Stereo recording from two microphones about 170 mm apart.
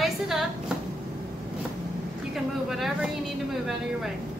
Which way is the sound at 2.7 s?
Centre (ahead or behind).